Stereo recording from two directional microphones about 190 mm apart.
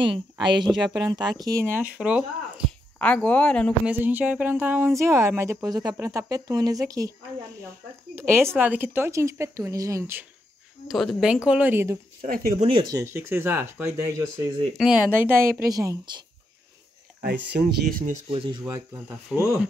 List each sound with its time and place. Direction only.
0.0 s speech: 25° right (ahead or behind)
2.0 s speech: 5° right (ahead or behind)
3.0 s speech: 5° left (ahead or behind)
3.8 s a woman's voice: 10° right (ahead or behind)
8.2 s a woman's voice: 15° right (ahead or behind)
10.9 s speech: centre (ahead or behind)
12.2 s speech: 45° right (ahead or behind)
12.6 s a woman's voice: 25° right (ahead or behind)
17.2 s speech: 60° right (ahead or behind); by 18.2 s 45° right (ahead or behind)
18.3 s speech: 25° right (ahead or behind)
19.0 s a woman's voice: 10° right (ahead or behind)